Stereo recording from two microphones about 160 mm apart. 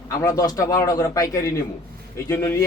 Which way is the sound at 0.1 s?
20° left (ahead or behind).